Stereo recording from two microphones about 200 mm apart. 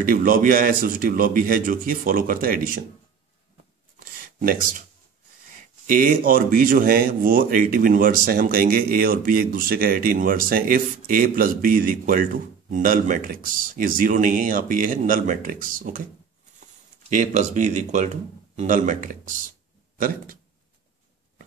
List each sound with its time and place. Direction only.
0.0 s speech: 45° right (ahead or behind)
4.4 s speech: 45° right (ahead or behind)
5.9 s speech: 45° right (ahead or behind)
17.1 s speech: 40° right (ahead or behind)